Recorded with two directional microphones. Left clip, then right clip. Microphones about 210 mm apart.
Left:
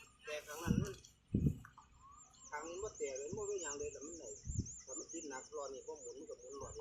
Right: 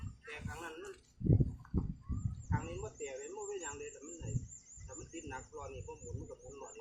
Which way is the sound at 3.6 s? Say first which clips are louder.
Left 1 dB; 5° right (ahead or behind).